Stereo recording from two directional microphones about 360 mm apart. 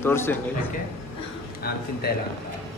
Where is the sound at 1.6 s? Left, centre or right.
Left.